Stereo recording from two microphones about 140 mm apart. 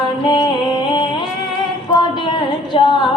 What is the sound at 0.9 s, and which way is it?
Music, 35° left (ahead or behind).